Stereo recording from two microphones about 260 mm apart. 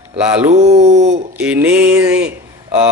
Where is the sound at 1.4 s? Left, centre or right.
Centre.